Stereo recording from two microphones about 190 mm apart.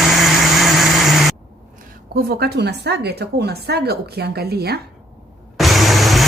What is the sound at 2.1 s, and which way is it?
A woman's voice, 55° right (ahead or behind).